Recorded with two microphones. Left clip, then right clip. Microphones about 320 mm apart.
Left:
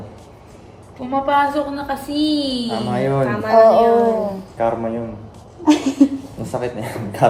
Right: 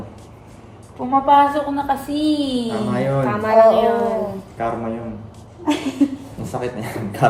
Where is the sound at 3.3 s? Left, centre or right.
Right.